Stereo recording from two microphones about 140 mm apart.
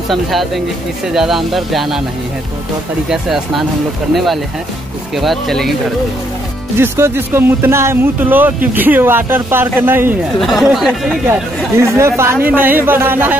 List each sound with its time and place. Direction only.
0.1 s speech: centre (ahead or behind)
3.1 s speech: centre (ahead or behind)
6.8 s speech: 15° right (ahead or behind)
10.4 s speech: centre (ahead or behind)
11.8 s speech: 20° right (ahead or behind)